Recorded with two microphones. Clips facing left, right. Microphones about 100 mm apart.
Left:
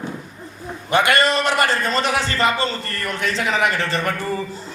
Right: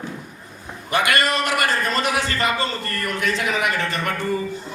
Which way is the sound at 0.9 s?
30° left (ahead or behind).